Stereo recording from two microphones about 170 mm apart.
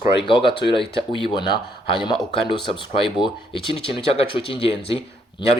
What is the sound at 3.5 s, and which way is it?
A man's voice, 30° left (ahead or behind).